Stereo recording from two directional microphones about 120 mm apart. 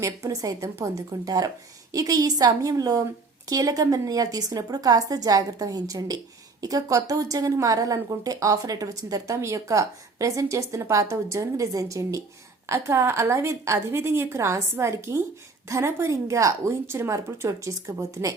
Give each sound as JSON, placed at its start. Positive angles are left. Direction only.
{"t": 0.0, "sound": "a woman's voice", "side_deg": -30}